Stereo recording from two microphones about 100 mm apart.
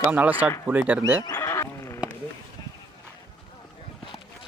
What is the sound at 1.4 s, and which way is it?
Horse, 30° left (ahead or behind).